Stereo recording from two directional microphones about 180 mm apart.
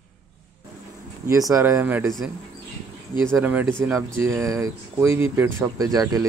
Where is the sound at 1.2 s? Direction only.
20° right (ahead or behind).